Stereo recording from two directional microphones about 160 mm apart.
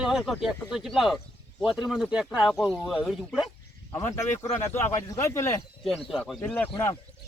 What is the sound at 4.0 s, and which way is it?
Speech, 15° left (ahead or behind).